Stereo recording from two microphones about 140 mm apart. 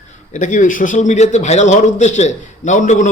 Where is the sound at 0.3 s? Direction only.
65° left (ahead or behind).